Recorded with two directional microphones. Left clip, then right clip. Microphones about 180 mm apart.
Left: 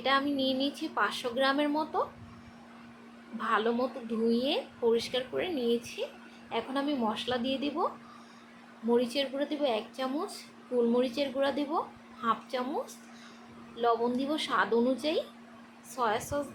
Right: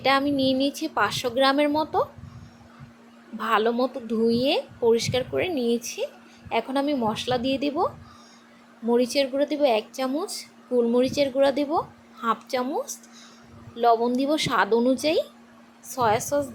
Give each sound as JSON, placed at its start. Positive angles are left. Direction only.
{"t": 0.0, "sound": "a woman's voice", "side_deg": -40}
{"t": 3.3, "sound": "a woman's voice", "side_deg": -40}
{"t": 8.9, "sound": "a woman's voice", "side_deg": -35}